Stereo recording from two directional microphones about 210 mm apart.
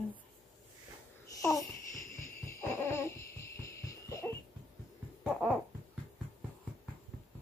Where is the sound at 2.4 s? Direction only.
10° left (ahead or behind).